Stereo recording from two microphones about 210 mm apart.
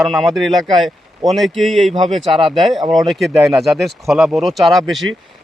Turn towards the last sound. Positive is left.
turn(degrees=0)  # may be behind; listen again after turning